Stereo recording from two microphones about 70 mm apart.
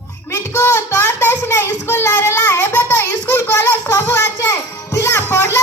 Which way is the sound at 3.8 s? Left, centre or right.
Left.